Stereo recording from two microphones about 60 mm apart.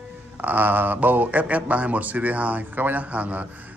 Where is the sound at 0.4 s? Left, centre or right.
Right.